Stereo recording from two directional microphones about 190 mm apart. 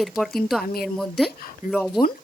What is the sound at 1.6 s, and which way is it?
Speech, 45° left (ahead or behind).